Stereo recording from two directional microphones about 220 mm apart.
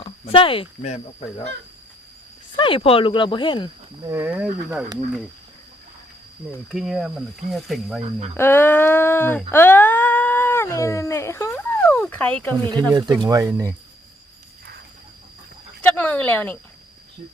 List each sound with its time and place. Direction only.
0.0 s speech: 25° left (ahead or behind)
2.6 s speech: 25° left (ahead or behind)
4.0 s speech: 10° right (ahead or behind)
6.7 s speech: centre (ahead or behind)
8.4 s a sound: 10° left (ahead or behind)
12.9 s speech: 15° right (ahead or behind)
15.8 s a sound: 5° left (ahead or behind)